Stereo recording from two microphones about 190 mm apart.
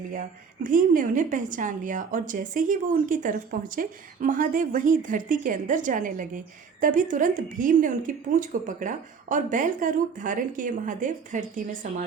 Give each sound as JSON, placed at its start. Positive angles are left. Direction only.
{"t": 0.1, "sound": "a woman's voice", "side_deg": -45}